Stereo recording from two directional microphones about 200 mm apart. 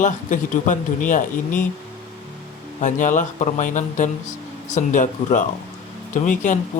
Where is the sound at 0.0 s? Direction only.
40° left (ahead or behind).